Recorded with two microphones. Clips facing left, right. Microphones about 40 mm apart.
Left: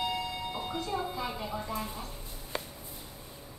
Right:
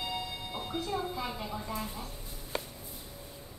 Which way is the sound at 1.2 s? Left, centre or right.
Centre.